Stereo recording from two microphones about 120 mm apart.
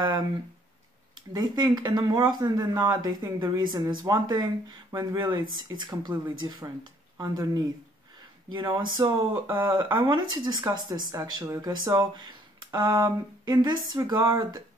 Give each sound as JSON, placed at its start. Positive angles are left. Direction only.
{"t": 1.1, "sound": "speech", "side_deg": -35}
{"t": 7.2, "sound": "speech", "side_deg": -35}